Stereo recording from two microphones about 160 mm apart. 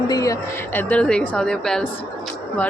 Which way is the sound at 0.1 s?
20° left (ahead or behind).